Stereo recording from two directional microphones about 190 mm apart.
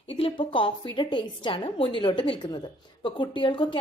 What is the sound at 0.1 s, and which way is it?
A woman's voice, 30° left (ahead or behind).